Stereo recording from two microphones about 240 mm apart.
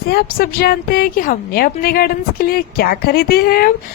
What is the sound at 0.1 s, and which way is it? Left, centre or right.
A woman's voice, left.